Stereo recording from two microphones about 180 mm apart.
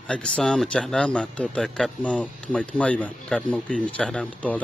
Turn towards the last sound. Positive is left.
turn(degrees=10)  # may be behind; listen again after turning